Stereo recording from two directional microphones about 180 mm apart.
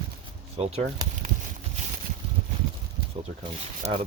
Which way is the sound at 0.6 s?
35° right (ahead or behind).